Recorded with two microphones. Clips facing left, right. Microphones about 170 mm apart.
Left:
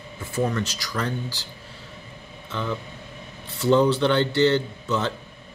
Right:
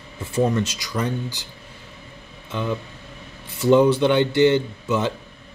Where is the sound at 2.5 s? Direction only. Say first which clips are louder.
Right 3 dB; 20° right (ahead or behind).